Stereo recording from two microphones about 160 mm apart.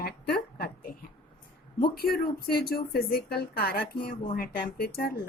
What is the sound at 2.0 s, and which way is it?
A woman's voice, 70° left (ahead or behind).